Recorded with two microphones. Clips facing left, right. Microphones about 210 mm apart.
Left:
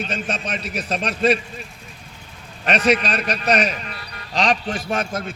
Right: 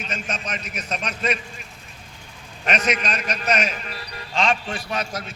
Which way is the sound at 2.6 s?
35° left (ahead or behind).